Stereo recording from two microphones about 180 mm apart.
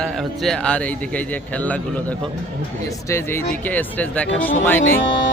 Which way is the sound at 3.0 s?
15° left (ahead or behind).